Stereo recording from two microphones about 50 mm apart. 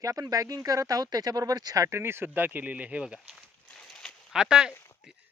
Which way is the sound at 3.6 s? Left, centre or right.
Centre.